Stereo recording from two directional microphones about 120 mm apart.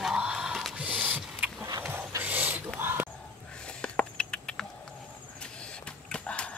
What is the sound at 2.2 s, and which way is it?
Whispering, 15° right (ahead or behind).